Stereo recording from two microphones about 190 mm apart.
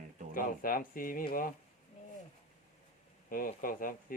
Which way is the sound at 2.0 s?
35° left (ahead or behind).